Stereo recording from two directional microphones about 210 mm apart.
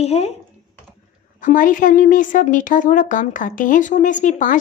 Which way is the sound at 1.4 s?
40° left (ahead or behind).